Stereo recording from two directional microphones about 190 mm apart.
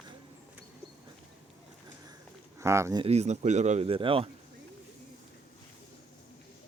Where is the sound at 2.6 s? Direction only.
15° right (ahead or behind).